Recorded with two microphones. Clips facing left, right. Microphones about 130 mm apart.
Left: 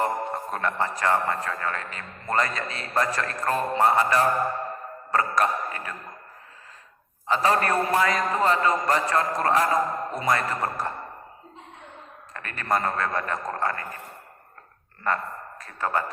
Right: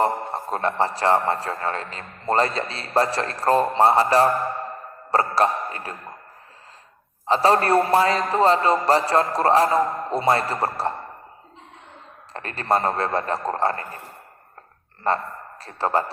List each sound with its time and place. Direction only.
0.0 s speech: 35° right (ahead or behind)
7.3 s speech: 30° right (ahead or behind)
12.3 s speech: 30° right (ahead or behind)
15.0 s a man's voice: 30° right (ahead or behind)